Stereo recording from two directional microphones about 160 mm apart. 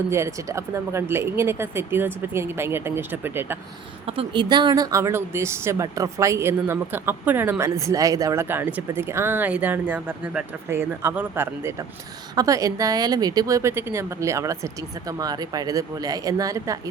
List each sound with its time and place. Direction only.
0.1 s speech: 20° right (ahead or behind)
4.0 s a woman's voice: 35° right (ahead or behind); by 16.9 s 20° right (ahead or behind)